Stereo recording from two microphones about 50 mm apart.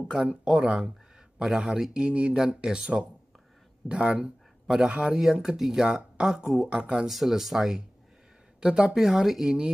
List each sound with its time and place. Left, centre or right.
0.1 s speech: centre
2.3 s speech: centre
4.8 s speech: right
5.2 s speech: centre
7.1 s a woman's voice: centre